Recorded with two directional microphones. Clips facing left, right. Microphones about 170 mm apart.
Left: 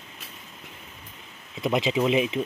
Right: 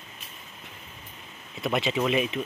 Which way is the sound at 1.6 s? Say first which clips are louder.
Left 3 dB; 20° left (ahead or behind).